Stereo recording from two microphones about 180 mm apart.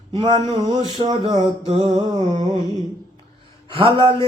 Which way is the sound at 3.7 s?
30° right (ahead or behind).